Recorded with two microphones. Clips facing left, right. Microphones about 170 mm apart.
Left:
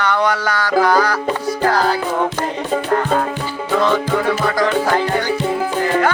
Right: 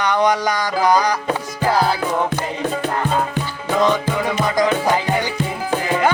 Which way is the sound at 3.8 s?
15° right (ahead or behind).